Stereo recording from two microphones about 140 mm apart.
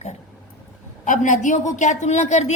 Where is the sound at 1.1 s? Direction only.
65° left (ahead or behind).